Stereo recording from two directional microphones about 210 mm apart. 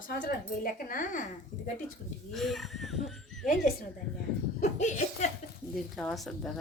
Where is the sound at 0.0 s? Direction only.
45° left (ahead or behind).